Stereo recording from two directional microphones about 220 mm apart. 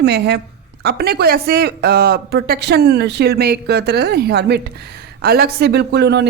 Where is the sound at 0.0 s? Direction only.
50° right (ahead or behind).